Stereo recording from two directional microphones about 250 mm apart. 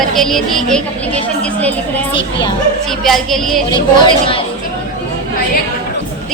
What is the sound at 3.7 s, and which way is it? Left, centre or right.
Speech, centre.